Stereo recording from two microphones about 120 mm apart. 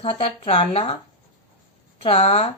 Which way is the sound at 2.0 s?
55° left (ahead or behind).